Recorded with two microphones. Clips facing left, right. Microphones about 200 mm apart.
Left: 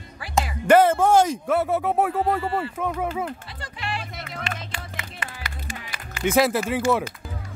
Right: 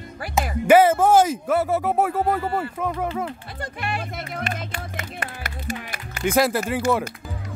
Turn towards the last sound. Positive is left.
turn(degrees=0)  # may be behind; listen again after turning